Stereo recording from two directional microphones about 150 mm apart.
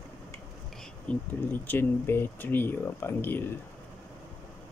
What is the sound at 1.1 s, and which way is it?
Speech, 10° left (ahead or behind).